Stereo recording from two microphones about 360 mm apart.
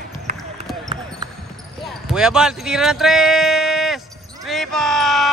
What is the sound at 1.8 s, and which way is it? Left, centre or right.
Speech, centre.